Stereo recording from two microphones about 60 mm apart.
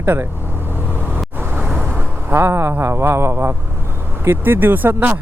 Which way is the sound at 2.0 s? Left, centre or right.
Right.